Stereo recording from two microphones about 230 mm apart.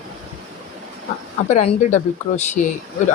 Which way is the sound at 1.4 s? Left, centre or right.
Left.